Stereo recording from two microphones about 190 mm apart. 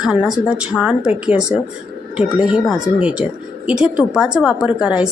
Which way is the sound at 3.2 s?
35° left (ahead or behind).